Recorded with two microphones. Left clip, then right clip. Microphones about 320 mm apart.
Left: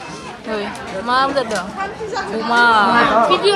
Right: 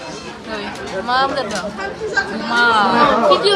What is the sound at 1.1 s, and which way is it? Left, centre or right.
Speech, centre.